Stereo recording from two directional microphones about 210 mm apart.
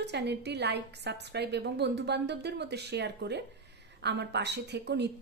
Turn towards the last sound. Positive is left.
turn(degrees=-55)  # may be behind; listen again after turning